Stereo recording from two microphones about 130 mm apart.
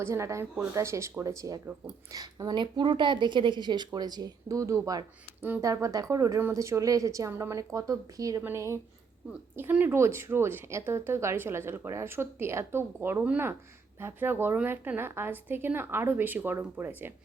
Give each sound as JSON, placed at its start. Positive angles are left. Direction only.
{"t": 0.0, "sound": "a woman's voice", "side_deg": -20}
{"t": 5.4, "sound": "speech", "side_deg": -15}
{"t": 5.6, "sound": "a woman's voice", "side_deg": -25}